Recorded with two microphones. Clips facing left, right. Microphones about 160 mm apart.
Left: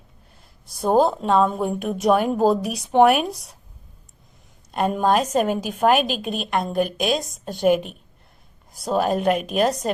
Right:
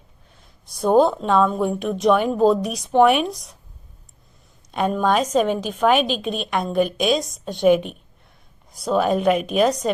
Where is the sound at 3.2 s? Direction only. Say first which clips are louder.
Right 2 dB; 65° left (ahead or behind).